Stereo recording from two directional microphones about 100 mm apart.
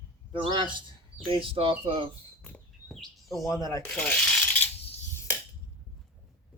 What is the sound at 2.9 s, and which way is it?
Chirp, centre (ahead or behind).